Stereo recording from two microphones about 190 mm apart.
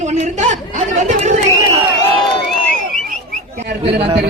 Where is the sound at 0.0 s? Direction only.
40° right (ahead or behind).